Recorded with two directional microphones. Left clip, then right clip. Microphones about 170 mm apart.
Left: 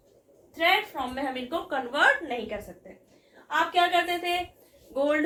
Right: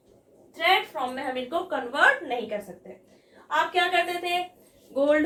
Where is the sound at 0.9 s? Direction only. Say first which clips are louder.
Right 3 dB; 25° left (ahead or behind).